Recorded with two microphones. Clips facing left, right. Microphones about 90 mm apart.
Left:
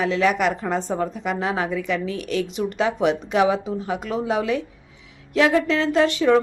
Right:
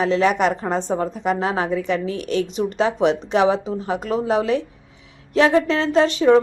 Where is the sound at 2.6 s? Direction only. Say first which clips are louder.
Right 2 dB; 30° right (ahead or behind).